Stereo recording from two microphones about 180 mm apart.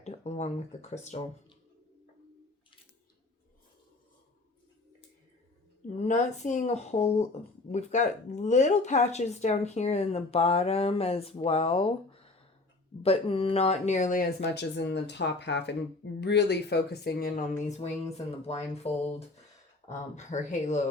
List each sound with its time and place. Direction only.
0.0 s speech: 35° left (ahead or behind)
5.9 s speech: 40° left (ahead or behind); by 17.4 s 55° left (ahead or behind)
17.6 s speech: 35° left (ahead or behind)
19.9 s speech: 40° left (ahead or behind)